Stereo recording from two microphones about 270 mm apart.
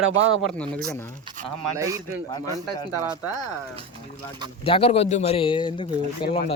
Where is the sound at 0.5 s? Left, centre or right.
Centre.